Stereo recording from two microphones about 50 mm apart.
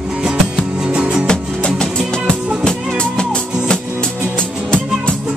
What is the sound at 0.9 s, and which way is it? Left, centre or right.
Music, right.